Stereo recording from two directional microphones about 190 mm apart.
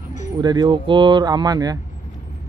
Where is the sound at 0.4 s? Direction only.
20° right (ahead or behind).